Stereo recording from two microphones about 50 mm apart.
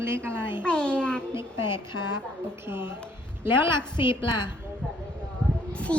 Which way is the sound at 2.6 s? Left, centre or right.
Right.